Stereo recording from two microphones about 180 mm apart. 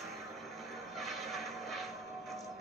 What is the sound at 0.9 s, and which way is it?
Vehicle, centre (ahead or behind).